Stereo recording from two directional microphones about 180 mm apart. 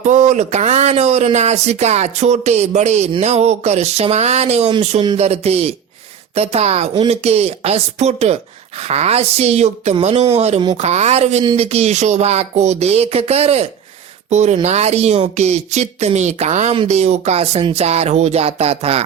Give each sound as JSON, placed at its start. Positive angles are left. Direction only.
{"t": 0.0, "sound": "speech", "side_deg": -40}